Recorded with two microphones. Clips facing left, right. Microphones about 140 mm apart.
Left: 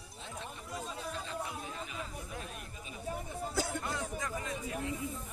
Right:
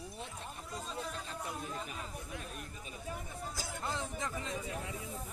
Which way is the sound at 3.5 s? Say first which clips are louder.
Left 8 dB; 60° left (ahead or behind).